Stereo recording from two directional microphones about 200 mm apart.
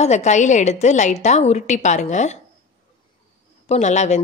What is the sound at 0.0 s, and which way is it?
A woman's voice, 35° left (ahead or behind).